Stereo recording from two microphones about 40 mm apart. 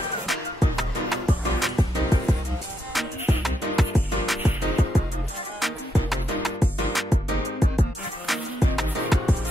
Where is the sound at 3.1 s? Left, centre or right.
Right.